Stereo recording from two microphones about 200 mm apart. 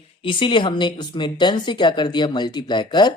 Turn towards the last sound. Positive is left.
turn(degrees=20)  # may be behind; listen again after turning